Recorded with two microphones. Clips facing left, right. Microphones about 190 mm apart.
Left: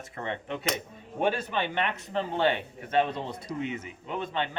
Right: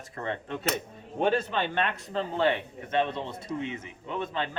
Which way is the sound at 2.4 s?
30° left (ahead or behind).